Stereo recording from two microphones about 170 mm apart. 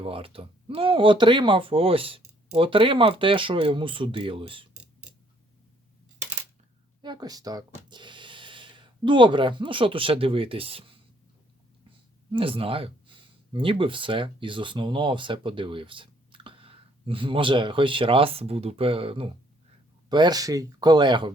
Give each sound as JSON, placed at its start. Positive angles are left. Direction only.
{"t": 0.0, "sound": "speech", "side_deg": -35}
{"t": 4.8, "sound": "a sound", "side_deg": -5}
{"t": 7.0, "sound": "speech", "side_deg": -25}
{"t": 12.3, "sound": "speech", "side_deg": -30}